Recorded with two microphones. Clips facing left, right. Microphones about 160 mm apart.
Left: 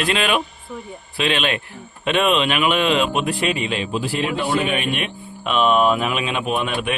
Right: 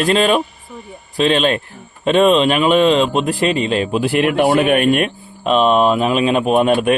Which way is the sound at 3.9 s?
65° right (ahead or behind).